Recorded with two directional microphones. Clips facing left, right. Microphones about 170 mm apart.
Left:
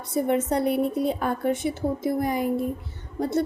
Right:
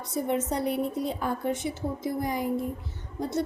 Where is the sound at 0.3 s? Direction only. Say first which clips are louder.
Left 4 dB; 60° left (ahead or behind).